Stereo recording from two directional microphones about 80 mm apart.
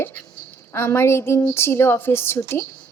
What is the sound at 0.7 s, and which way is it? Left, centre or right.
A woman's voice, left.